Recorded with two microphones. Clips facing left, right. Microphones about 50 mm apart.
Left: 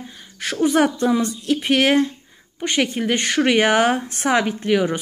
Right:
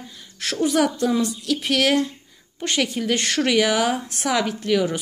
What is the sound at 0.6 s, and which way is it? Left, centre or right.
Speech, left.